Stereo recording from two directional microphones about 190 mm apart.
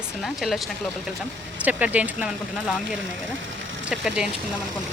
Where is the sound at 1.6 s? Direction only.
10° right (ahead or behind).